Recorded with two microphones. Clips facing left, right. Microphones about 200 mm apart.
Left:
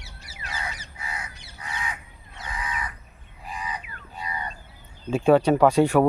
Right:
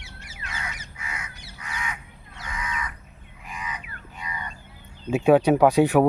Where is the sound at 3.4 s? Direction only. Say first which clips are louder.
Left 2 dB; 35° left (ahead or behind).